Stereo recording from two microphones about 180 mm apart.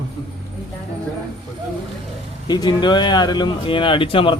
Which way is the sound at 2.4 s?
25° left (ahead or behind).